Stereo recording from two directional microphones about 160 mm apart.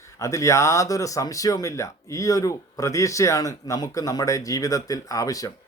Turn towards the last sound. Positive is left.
turn(degrees=20)  # may be behind; listen again after turning